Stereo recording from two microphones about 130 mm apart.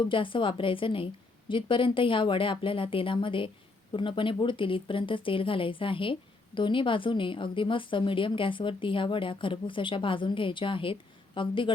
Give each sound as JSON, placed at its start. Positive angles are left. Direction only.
{"t": 0.0, "sound": "speech", "side_deg": 40}